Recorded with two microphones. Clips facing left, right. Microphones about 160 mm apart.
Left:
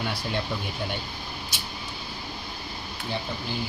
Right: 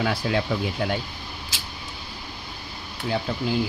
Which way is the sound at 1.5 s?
90° right.